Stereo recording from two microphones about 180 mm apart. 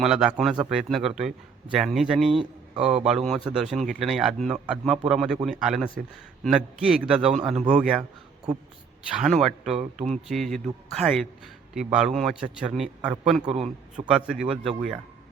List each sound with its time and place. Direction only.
0.0 s a man's voice: 5° right (ahead or behind)
7.4 s speech: 35° right (ahead or behind)
7.7 s a man's voice: 5° right (ahead or behind)
9.1 s a man's voice: centre (ahead or behind)
13.4 s speech: 35° right (ahead or behind)
14.1 s a man's voice: 5° right (ahead or behind)